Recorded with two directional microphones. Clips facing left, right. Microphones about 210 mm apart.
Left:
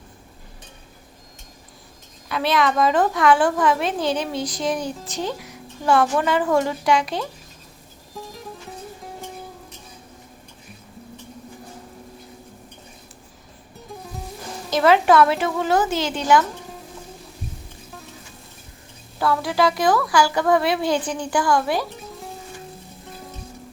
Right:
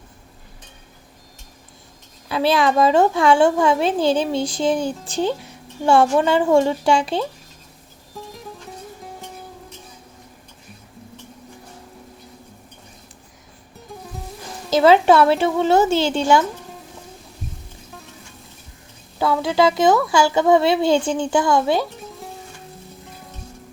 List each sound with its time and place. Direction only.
2.3 s a woman's voice: 30° right (ahead or behind)
8.1 s music: centre (ahead or behind)
13.7 s music: centre (ahead or behind)
14.7 s a woman's voice: 25° right (ahead or behind)
19.2 s a woman's voice: 25° right (ahead or behind)